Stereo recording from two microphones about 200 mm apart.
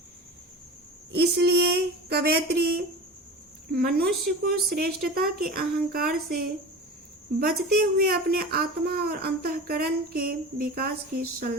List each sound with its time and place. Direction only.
1.1 s speech: 55° right (ahead or behind)
4.1 s speech: centre (ahead or behind)
4.4 s speech: 50° right (ahead or behind)
7.9 s speech: 50° right (ahead or behind)